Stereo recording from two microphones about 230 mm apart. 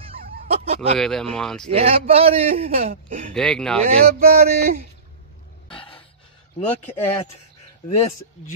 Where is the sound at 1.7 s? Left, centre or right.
Right.